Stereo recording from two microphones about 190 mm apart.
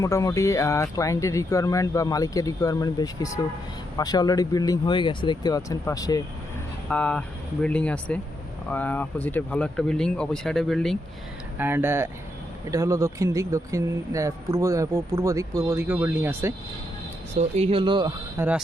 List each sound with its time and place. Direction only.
0.0 s speech: 15° left (ahead or behind)
6.8 s speech: 5° left (ahead or behind)
11.5 s speech: 10° right (ahead or behind)
17.3 s speech: 35° right (ahead or behind)
18.3 s speech: 10° right (ahead or behind)